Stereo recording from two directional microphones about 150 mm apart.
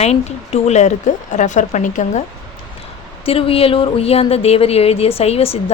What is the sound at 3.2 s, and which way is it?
Speech, 40° left (ahead or behind).